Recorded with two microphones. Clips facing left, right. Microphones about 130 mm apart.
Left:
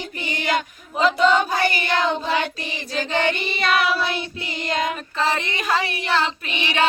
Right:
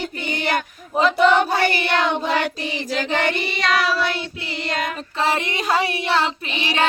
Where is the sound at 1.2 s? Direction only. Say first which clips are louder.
Right 3 dB; 60° right (ahead or behind).